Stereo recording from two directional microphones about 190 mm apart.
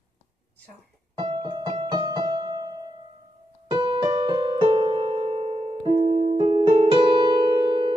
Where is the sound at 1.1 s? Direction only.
25° right (ahead or behind).